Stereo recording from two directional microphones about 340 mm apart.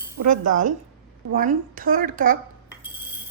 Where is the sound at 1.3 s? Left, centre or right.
Right.